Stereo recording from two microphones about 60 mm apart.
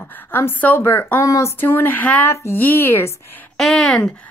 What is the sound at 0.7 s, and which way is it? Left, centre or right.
Speech, left.